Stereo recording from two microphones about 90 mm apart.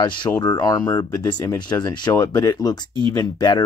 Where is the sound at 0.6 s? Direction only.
45° left (ahead or behind).